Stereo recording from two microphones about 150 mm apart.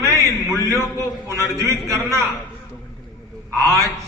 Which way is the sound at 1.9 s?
20° right (ahead or behind).